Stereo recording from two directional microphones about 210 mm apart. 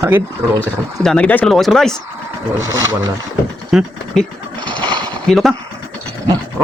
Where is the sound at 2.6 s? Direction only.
15° right (ahead or behind).